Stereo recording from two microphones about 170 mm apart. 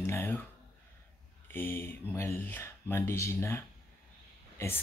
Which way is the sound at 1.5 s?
15° left (ahead or behind).